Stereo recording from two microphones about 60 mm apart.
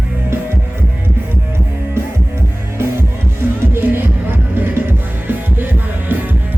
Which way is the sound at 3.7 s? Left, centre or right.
Right.